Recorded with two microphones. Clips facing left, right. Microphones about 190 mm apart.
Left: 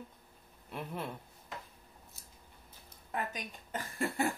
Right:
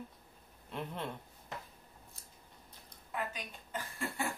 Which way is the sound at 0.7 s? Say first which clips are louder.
Even; 5° left (ahead or behind).